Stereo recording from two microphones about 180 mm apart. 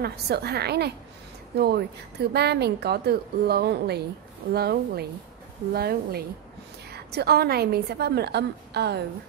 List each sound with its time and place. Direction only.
0.0 s a woman's voice: 60° right (ahead or behind)